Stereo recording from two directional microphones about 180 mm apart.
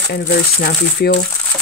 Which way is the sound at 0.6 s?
60° left (ahead or behind).